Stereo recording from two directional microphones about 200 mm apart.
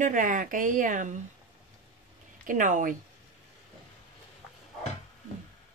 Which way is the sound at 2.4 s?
40° right (ahead or behind).